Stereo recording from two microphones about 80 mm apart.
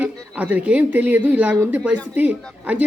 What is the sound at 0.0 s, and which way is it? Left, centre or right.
A man's voice, right.